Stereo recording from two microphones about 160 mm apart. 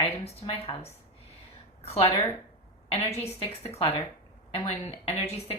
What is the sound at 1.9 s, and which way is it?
A woman's voice, 40° left (ahead or behind).